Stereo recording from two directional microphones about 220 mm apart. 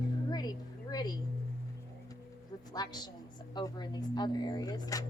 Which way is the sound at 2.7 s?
20° left (ahead or behind).